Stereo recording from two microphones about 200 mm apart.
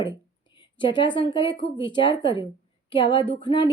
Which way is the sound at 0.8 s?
25° left (ahead or behind).